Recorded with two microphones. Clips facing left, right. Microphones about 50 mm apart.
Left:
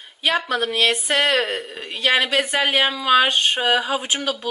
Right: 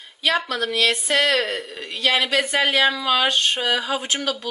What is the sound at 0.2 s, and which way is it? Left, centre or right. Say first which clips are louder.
Speech: left 1 dB; centre.